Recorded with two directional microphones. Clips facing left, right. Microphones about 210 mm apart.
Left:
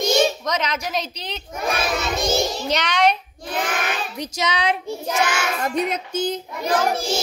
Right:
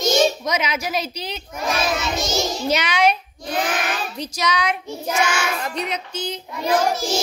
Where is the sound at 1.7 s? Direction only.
55° left (ahead or behind).